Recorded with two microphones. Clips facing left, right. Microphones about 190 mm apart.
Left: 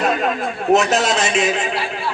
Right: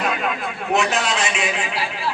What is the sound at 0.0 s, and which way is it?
A man's voice, 40° left (ahead or behind).